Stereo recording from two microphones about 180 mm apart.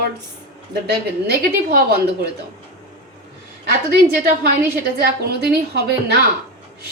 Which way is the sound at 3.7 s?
60° right (ahead or behind).